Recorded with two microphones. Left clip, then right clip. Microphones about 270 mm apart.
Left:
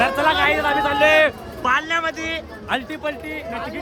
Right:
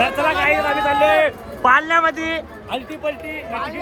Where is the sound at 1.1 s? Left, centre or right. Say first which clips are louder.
Even; left.